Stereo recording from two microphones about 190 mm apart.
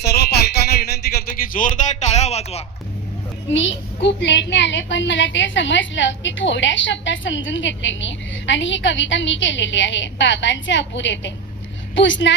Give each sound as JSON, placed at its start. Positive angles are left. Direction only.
{"t": 0.0, "sound": "a sound", "side_deg": 60}
{"t": 1.0, "sound": "music", "side_deg": 45}
{"t": 3.5, "sound": "a woman's voice", "side_deg": 75}